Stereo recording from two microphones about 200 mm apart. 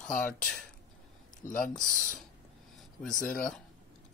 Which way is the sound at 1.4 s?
45° left (ahead or behind).